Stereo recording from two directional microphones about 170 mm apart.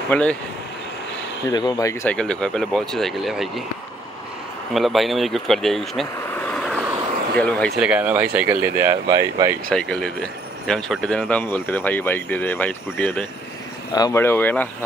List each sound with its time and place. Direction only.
0.1 s speech: 5° left (ahead or behind)
1.5 s speech: 25° left (ahead or behind)
2.0 s speech: 5° left (ahead or behind)
4.7 s speech: centre (ahead or behind)
7.8 s speech: 10° right (ahead or behind)
9.7 s speech: 5° left (ahead or behind)
13.9 s speech: 20° left (ahead or behind)